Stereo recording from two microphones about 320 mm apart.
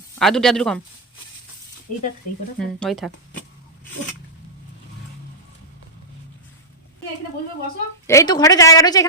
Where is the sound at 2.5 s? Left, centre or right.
Centre.